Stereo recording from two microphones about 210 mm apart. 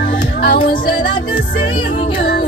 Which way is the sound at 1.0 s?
45° left (ahead or behind).